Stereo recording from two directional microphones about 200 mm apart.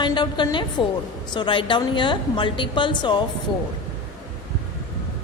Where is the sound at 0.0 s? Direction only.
25° left (ahead or behind).